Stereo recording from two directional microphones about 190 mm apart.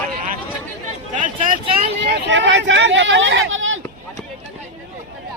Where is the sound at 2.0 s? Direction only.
70° right (ahead or behind); by 3.8 s 90° right.